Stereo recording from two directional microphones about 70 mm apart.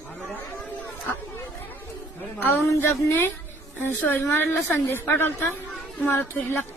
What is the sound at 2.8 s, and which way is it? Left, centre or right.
A woman's voice, left.